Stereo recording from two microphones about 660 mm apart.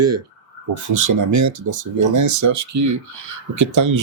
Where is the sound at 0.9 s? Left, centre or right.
Right.